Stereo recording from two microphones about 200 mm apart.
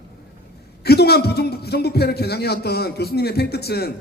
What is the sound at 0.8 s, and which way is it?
A man's voice, 55° left (ahead or behind).